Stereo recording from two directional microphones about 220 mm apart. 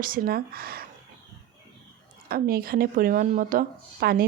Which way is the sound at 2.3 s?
40° right (ahead or behind).